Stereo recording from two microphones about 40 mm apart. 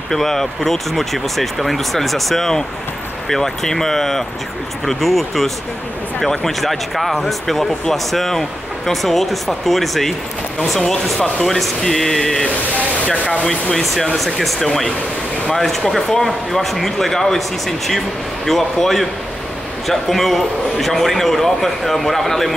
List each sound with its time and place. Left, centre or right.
0.1 s speech: centre
11.4 s speech: centre
13.0 s speech: left
14.1 s speech: centre